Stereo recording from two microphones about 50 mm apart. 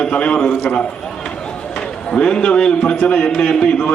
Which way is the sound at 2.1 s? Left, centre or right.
Centre.